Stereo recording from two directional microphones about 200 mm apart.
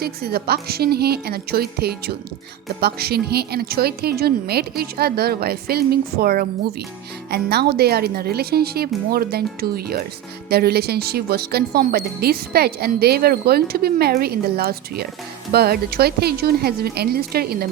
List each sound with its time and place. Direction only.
0.0 s speech: 50° right (ahead or behind)